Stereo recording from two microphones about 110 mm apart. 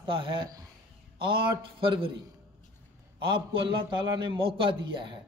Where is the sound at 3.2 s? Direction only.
50° right (ahead or behind).